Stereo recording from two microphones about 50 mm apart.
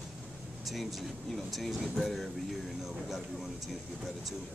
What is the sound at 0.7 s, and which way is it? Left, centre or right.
Speech, centre.